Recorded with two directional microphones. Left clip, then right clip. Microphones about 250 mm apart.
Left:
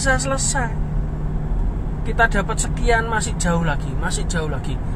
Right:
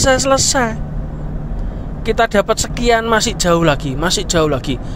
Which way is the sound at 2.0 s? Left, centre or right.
Right.